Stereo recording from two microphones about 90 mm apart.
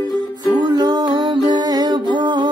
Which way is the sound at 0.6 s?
55° right (ahead or behind).